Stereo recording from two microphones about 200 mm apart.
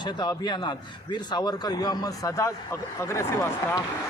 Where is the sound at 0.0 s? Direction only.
20° left (ahead or behind).